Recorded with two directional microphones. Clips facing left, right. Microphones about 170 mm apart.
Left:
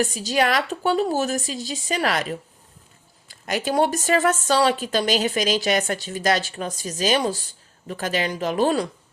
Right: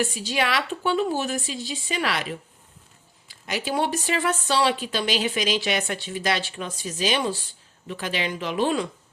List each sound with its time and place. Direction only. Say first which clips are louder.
0.0 s a woman's voice: left 4 dB; 40° left (ahead or behind)
3.2 s speech: left 4 dB; 45° left (ahead or behind)